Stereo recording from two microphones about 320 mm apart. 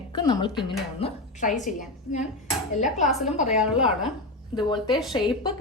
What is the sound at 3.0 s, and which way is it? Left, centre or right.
Speech, centre.